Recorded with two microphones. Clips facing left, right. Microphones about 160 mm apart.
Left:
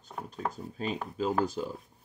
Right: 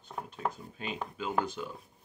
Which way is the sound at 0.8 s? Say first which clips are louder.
Left 5 dB; 35° left (ahead or behind).